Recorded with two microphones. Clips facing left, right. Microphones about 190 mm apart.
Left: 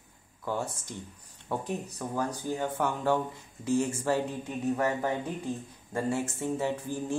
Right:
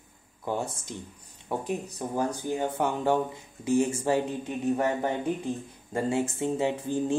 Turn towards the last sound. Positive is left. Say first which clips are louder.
# right 4 dB
turn(degrees=-20)  # may be behind; listen again after turning